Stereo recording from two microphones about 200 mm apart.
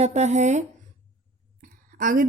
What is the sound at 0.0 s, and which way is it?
Speech, 35° right (ahead or behind).